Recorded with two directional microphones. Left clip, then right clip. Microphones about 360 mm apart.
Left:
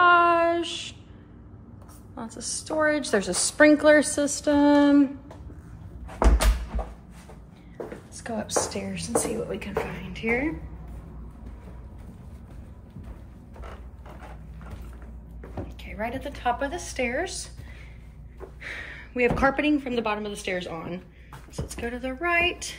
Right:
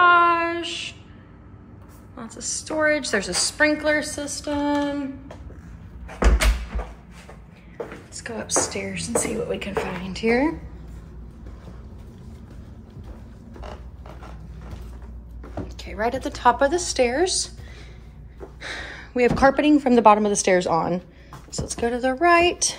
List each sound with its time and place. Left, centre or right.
0.0 s child singing: centre
2.1 s a woman's voice: centre
8.2 s a woman's voice: centre
15.8 s a woman's voice: centre
18.6 s speech: centre
19.9 s a woman's voice: right
20.6 s a woman's voice: centre